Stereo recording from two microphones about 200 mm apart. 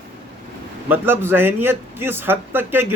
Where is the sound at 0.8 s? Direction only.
10° right (ahead or behind).